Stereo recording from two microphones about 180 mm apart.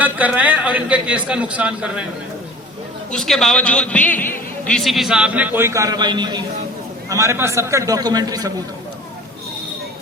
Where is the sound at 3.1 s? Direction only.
Centre (ahead or behind); by 8.5 s 20° right (ahead or behind).